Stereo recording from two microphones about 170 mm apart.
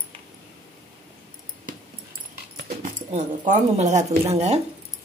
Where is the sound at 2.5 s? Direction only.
50° right (ahead or behind).